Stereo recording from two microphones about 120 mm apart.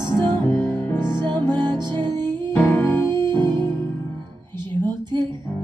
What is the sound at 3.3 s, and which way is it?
Music, 40° right (ahead or behind).